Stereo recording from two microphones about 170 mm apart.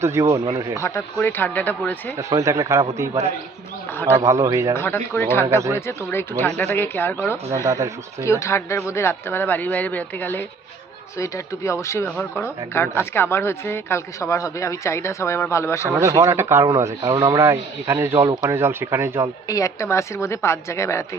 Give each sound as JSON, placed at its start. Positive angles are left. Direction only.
{"t": 0.0, "sound": "a man's voice", "side_deg": -15}
{"t": 0.8, "sound": "a woman's voice", "side_deg": 15}
{"t": 2.1, "sound": "speech", "side_deg": -20}
{"t": 4.3, "sound": "speech", "side_deg": -15}
{"t": 4.7, "sound": "a woman's voice", "side_deg": 15}
{"t": 5.5, "sound": "speech", "side_deg": -15}
{"t": 5.7, "sound": "a woman's voice", "side_deg": 15}
{"t": 7.5, "sound": "speech", "side_deg": -20}
{"t": 8.2, "sound": "a woman's voice", "side_deg": 15}
{"t": 16.0, "sound": "speech", "side_deg": -20}
{"t": 19.5, "sound": "a woman's voice", "side_deg": 20}